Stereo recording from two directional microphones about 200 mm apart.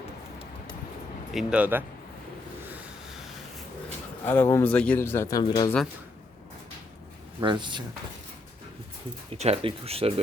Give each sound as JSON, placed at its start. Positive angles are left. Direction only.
{"t": 1.3, "sound": "speech", "side_deg": -5}
{"t": 2.7, "sound": "vehicle", "side_deg": 0}
{"t": 4.3, "sound": "speech", "side_deg": 10}
{"t": 7.4, "sound": "speech", "side_deg": -25}
{"t": 9.3, "sound": "speech", "side_deg": -30}